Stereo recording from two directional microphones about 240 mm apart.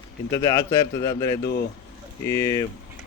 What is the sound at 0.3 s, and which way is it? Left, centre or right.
Speech, centre.